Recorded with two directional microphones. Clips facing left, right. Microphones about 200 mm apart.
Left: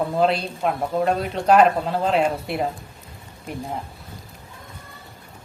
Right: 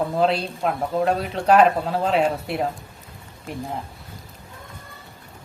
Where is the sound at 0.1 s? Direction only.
Centre (ahead or behind).